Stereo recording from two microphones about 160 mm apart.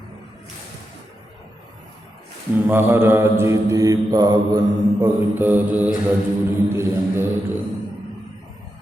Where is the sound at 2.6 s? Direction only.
15° right (ahead or behind).